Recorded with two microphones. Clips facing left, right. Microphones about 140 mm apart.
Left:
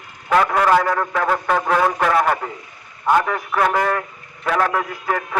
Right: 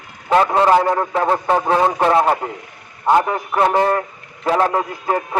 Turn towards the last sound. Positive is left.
turn(degrees=-25)  # may be behind; listen again after turning